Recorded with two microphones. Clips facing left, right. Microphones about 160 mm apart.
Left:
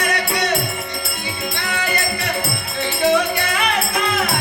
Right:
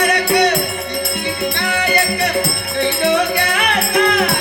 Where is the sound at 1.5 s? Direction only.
65° right (ahead or behind).